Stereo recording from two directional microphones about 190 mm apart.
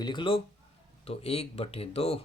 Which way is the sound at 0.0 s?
25° left (ahead or behind).